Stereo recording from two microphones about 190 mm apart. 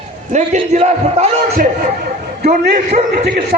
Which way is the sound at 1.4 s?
50° right (ahead or behind).